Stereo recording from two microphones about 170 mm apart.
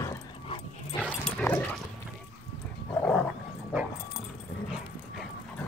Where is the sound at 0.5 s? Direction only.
25° left (ahead or behind).